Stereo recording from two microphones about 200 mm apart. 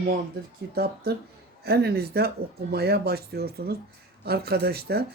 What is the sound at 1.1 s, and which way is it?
Speech, 50° right (ahead or behind).